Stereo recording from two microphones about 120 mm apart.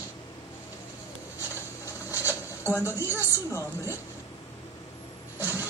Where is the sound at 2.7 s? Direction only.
20° left (ahead or behind).